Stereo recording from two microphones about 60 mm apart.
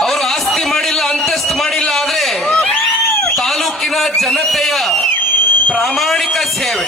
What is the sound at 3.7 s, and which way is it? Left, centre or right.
A man's voice, centre.